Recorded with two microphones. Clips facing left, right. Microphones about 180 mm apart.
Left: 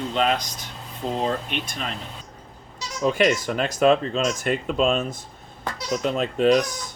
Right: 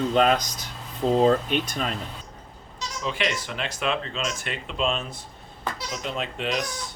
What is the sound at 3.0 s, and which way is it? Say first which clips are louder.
Speech: left 9 dB; 45° left (ahead or behind).